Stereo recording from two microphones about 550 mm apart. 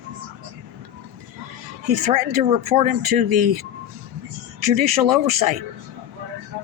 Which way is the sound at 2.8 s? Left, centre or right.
Right.